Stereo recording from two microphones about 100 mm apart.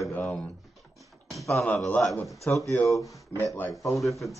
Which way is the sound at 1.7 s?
15° left (ahead or behind).